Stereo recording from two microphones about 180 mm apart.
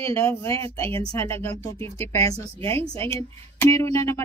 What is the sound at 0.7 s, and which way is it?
Speech, 30° right (ahead or behind).